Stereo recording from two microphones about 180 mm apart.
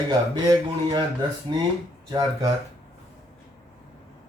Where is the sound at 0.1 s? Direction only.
25° right (ahead or behind).